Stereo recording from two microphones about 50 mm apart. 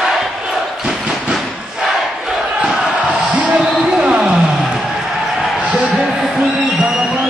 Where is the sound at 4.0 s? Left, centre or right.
Centre.